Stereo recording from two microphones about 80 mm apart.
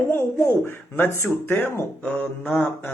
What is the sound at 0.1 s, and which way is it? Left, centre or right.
Speech, left.